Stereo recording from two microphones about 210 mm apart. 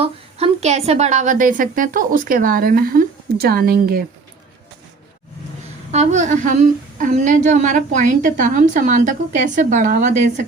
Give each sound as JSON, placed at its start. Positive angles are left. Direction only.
{"t": 0.0, "sound": "a woman's voice", "side_deg": -30}
{"t": 5.9, "sound": "a woman's voice", "side_deg": -35}